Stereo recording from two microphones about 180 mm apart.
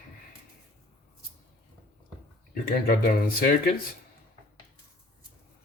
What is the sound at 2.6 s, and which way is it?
Speech, 55° left (ahead or behind).